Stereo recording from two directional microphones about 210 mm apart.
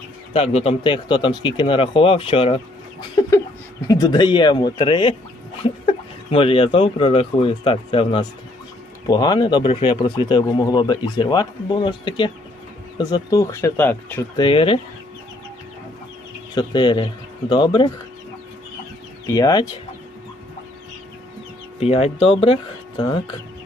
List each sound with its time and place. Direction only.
0.3 s speech: 30° left (ahead or behind)
3.2 s chicken: 15° left (ahead or behind)
3.8 s speech: 15° left (ahead or behind)
6.3 s speech: 25° left (ahead or behind); by 14.3 s 10° left (ahead or behind)
14.3 s speech: 25° left (ahead or behind)
16.6 s speech: 20° left (ahead or behind)
19.3 s speech: 15° left (ahead or behind)
21.8 s speech: 30° left (ahead or behind)